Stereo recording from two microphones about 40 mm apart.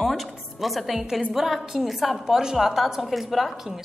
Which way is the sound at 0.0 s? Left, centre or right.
Centre.